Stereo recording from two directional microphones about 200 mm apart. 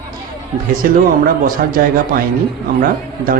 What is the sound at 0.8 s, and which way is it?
Speech, 45° right (ahead or behind).